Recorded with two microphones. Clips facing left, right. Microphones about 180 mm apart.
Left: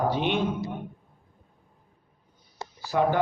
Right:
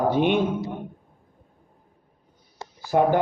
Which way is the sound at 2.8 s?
50° right (ahead or behind).